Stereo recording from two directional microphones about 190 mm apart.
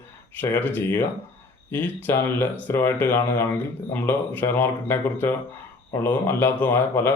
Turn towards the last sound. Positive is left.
turn(degrees=10)  # may be behind; listen again after turning